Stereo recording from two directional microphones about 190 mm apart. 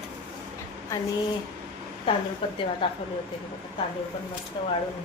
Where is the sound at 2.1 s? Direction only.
30° left (ahead or behind).